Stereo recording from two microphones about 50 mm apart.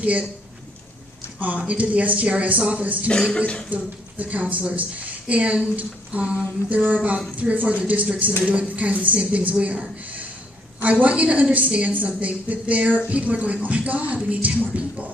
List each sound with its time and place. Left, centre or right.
0.0 s speech: right
1.4 s speech: right
11.0 s speech: right